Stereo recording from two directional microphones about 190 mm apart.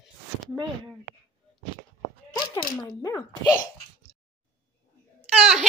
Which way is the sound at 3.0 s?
20° left (ahead or behind).